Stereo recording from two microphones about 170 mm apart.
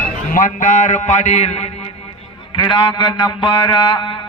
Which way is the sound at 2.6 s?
30° left (ahead or behind).